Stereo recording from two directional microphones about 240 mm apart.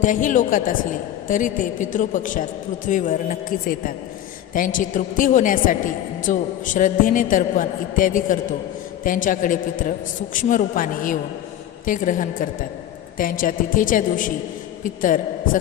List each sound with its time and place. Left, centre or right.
0.0 s a woman's voice: left